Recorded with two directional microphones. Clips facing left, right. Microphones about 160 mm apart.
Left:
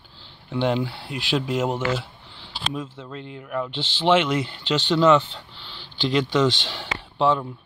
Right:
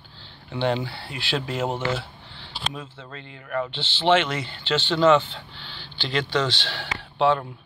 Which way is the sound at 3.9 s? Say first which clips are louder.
Left 1 dB; 10° left (ahead or behind).